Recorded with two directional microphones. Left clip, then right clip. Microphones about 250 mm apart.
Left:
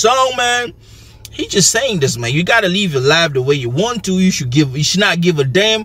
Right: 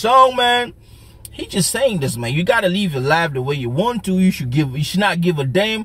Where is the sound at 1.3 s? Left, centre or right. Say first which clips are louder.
Left 8 dB; centre.